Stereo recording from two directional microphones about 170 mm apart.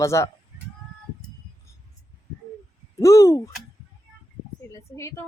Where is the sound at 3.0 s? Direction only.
20° left (ahead or behind).